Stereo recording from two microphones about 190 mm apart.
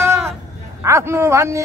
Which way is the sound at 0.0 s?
15° right (ahead or behind).